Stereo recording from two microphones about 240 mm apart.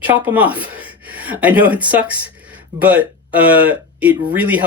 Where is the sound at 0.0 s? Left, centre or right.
Centre.